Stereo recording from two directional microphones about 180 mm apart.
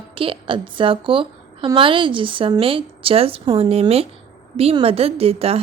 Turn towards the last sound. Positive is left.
turn(degrees=-35)  # may be behind; listen again after turning